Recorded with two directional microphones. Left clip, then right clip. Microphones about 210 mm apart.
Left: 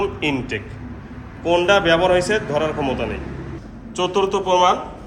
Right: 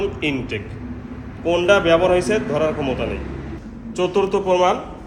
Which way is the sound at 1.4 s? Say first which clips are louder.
Even; centre (ahead or behind).